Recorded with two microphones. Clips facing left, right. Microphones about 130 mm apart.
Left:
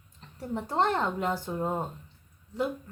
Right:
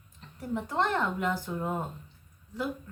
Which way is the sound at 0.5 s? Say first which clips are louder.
Left 2 dB; 30° left (ahead or behind).